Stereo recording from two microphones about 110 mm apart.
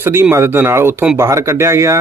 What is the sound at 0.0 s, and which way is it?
Speech, 20° right (ahead or behind).